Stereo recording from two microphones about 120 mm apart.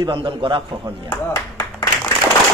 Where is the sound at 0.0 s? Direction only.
40° right (ahead or behind).